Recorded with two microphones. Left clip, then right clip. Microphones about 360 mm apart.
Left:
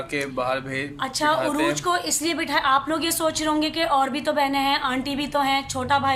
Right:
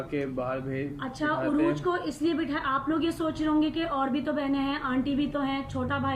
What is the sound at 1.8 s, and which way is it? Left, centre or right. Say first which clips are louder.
A woman's voice: left 5 dB; centre.